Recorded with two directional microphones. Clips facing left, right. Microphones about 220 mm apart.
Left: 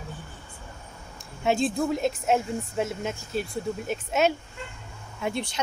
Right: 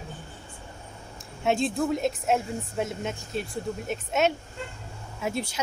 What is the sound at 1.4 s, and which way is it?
A woman's voice, centre (ahead or behind).